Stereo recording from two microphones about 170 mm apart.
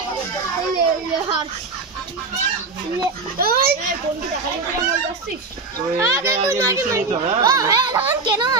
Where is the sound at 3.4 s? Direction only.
60° right (ahead or behind).